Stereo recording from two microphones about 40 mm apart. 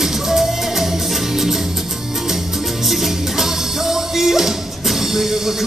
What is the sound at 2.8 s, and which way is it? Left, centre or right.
Music, centre.